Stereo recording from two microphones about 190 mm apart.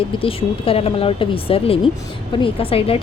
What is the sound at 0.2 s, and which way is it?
A woman's voice, 30° left (ahead or behind).